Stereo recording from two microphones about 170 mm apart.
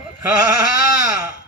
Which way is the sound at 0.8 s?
65° left (ahead or behind).